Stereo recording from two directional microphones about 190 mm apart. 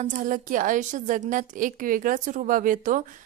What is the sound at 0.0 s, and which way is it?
A woman's voice, 40° right (ahead or behind).